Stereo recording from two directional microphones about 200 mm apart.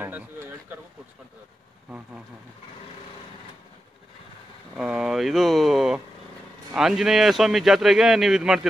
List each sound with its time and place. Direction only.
0.0 s a sound: 10° right (ahead or behind)
4.7 s vehicle: 5° right (ahead or behind)
6.7 s speech: centre (ahead or behind)